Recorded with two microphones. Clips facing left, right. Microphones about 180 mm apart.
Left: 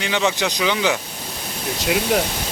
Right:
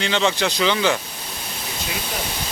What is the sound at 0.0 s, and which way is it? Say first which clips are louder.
Speech: even; 10° left (ahead or behind).